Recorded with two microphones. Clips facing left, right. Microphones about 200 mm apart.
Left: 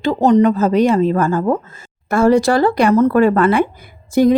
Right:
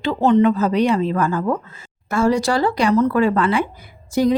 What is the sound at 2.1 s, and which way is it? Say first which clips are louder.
A woman's voice: left 5 dB; 55° left (ahead or behind).